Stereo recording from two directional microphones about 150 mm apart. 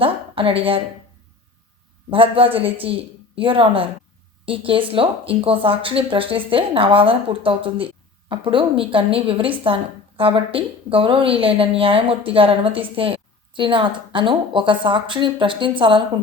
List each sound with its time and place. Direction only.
0.0 s speech: 40° right (ahead or behind)
2.0 s a woman's voice: 35° right (ahead or behind)